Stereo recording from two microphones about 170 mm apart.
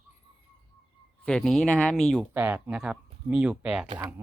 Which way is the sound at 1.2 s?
5° left (ahead or behind).